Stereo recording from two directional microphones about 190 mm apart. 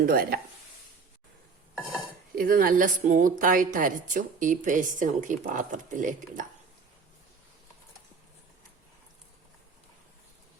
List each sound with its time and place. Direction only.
0.0 s a woman's voice: 50° right (ahead or behind)
2.3 s a woman's voice: 50° right (ahead or behind)